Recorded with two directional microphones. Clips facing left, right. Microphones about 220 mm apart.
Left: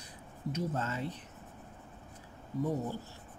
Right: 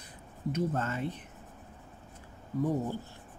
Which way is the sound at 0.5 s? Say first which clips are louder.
Right 3 dB; 55° right (ahead or behind).